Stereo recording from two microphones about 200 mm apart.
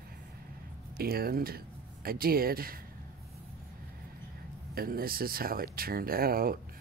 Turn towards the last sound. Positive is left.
turn(degrees=-45)  # may be behind; listen again after turning